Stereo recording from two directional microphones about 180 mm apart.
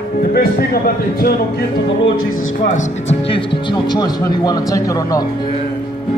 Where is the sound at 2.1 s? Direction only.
45° left (ahead or behind).